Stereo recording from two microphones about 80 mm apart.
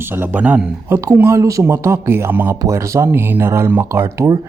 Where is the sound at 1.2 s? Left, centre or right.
Right.